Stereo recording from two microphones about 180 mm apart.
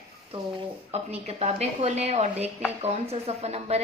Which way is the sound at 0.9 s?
35° right (ahead or behind).